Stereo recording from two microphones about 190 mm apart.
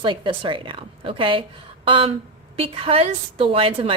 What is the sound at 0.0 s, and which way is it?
A woman's voice, 25° right (ahead or behind).